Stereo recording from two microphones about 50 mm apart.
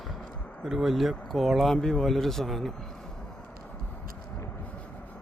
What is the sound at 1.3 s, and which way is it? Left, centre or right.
Speech, centre.